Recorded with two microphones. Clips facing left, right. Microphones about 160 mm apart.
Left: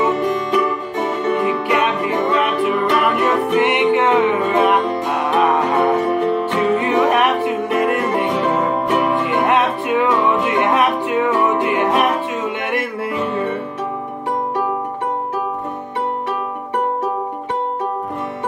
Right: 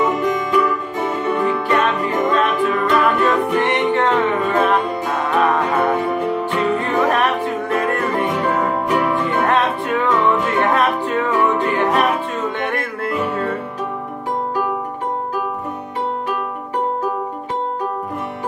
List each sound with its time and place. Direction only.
0.5 s music: 20° left (ahead or behind)
10.3 s music: 5° left (ahead or behind)
10.6 s music: 15° left (ahead or behind)